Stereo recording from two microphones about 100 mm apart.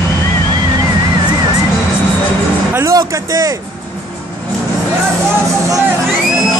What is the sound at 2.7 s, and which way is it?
Music, 25° right (ahead or behind).